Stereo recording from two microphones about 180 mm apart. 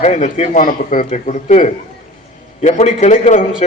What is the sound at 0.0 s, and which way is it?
A man's voice, 40° left (ahead or behind).